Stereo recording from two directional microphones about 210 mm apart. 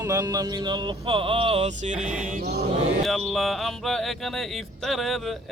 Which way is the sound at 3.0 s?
Centre (ahead or behind).